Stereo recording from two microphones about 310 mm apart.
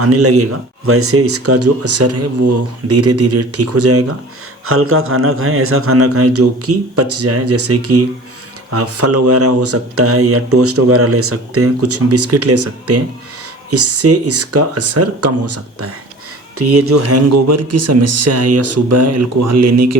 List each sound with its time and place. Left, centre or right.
0.0 s speech: right